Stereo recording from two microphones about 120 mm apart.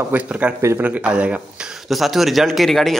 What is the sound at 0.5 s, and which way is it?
Speech, 25° right (ahead or behind).